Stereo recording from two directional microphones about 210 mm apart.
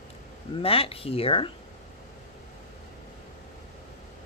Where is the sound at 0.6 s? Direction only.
25° left (ahead or behind).